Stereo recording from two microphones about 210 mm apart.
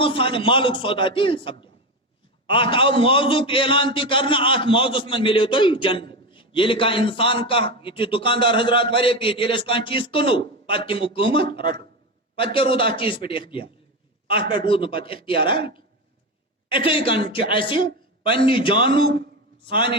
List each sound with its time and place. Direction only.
0.0 s a man's voice: 25° left (ahead or behind)